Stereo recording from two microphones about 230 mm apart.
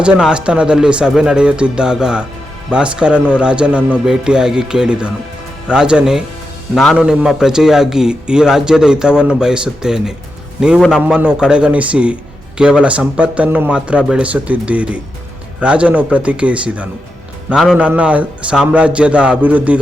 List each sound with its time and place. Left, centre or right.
0.0 s a man's voice: centre